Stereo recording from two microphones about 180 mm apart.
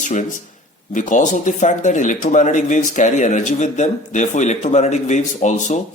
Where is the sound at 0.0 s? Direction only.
40° left (ahead or behind).